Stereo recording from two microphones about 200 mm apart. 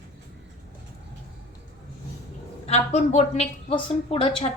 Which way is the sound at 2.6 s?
30° left (ahead or behind).